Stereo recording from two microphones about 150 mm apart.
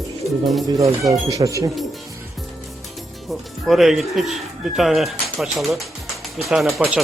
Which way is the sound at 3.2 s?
Centre (ahead or behind).